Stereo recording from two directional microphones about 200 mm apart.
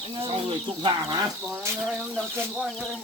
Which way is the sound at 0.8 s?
20° right (ahead or behind).